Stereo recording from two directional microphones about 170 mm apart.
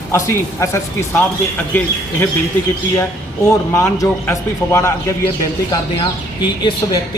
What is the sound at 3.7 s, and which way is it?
A man's voice, 15° left (ahead or behind).